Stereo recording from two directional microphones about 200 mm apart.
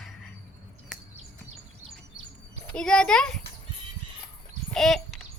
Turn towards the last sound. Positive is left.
turn(degrees=0)  # may be behind; listen again after turning